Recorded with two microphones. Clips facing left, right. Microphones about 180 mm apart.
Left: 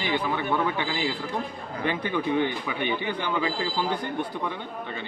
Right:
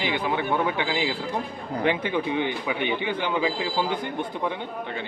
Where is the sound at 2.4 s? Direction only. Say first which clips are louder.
Right 1 dB; 15° right (ahead or behind).